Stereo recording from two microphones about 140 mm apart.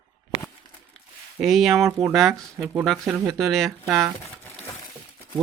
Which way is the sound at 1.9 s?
20° right (ahead or behind).